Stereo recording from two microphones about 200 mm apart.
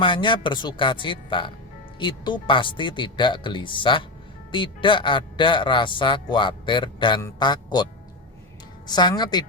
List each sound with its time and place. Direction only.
0.0 s a man's voice: 25° left (ahead or behind)
8.9 s a man's voice: 20° left (ahead or behind)